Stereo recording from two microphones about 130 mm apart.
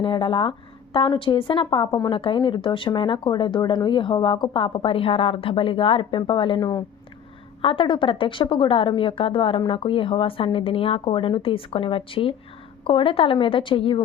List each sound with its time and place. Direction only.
0.0 s speech: 40° left (ahead or behind)
7.6 s a woman's voice: 40° left (ahead or behind)